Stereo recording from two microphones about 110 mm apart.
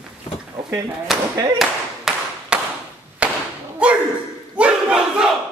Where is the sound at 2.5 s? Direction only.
10° right (ahead or behind).